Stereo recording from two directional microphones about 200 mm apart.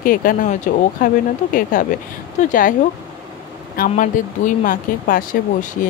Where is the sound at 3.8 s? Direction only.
40° left (ahead or behind).